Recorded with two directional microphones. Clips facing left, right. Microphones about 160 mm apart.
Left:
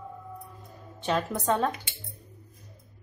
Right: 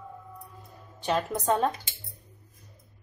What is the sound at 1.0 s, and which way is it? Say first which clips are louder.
Speech: even; 15° right (ahead or behind).